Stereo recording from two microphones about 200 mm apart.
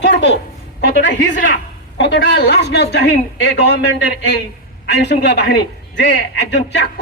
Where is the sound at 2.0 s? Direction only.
60° left (ahead or behind).